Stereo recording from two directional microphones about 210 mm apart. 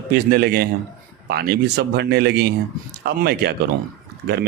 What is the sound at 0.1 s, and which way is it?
Speech, 45° right (ahead or behind).